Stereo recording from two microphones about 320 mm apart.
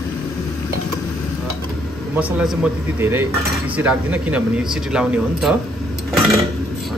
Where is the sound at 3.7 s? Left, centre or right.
Centre.